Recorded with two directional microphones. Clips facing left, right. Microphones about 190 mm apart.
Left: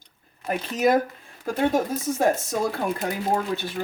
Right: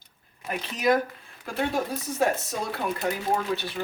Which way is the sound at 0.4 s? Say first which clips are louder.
Left 3 dB; 45° left (ahead or behind).